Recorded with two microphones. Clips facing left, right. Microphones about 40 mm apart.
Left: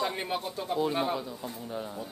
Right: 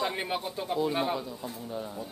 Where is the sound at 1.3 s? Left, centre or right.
Centre.